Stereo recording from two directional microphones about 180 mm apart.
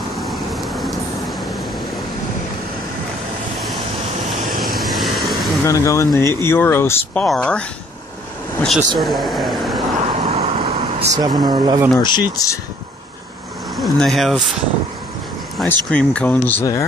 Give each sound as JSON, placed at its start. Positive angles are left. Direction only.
{"t": 0.1, "sound": "vehicle", "side_deg": 0}
{"t": 4.7, "sound": "vehicle", "side_deg": 0}
{"t": 5.7, "sound": "speech", "side_deg": 15}
{"t": 8.6, "sound": "speech", "side_deg": 0}
{"t": 9.9, "sound": "vehicle", "side_deg": -35}
{"t": 11.1, "sound": "speech", "side_deg": -25}
{"t": 11.9, "sound": "speech", "side_deg": 25}
{"t": 13.7, "sound": "speech", "side_deg": 0}
{"t": 15.5, "sound": "speech", "side_deg": 5}